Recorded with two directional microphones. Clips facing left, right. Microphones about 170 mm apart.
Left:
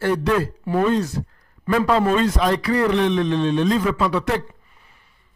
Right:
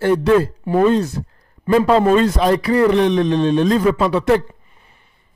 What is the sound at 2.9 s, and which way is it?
A man's voice, 40° right (ahead or behind).